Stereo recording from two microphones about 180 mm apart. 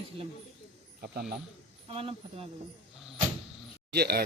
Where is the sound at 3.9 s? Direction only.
65° right (ahead or behind).